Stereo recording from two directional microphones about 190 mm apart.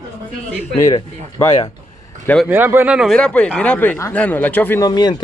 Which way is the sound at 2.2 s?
5° left (ahead or behind).